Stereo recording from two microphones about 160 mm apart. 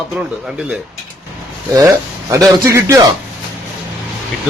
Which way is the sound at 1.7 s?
20° right (ahead or behind).